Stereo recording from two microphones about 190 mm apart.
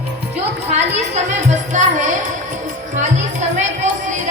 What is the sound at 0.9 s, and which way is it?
Music, 35° right (ahead or behind).